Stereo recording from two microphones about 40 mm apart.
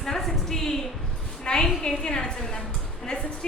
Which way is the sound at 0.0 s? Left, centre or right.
Centre.